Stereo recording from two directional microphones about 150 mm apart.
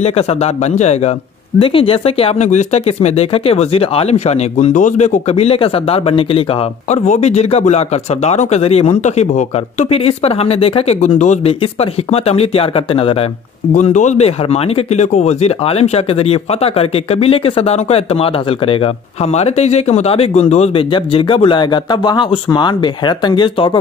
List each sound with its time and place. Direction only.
0.0 s speech: 45° left (ahead or behind)
1.6 s speech: 35° left (ahead or behind)
13.7 s speech: 55° left (ahead or behind)
20.9 s speech: 35° left (ahead or behind)